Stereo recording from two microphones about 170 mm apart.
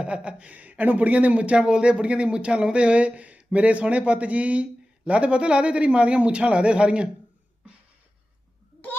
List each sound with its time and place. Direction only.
0.0 s speech: 5° right (ahead or behind)